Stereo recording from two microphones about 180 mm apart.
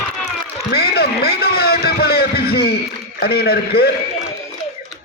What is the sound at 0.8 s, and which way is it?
A man's voice, 60° left (ahead or behind).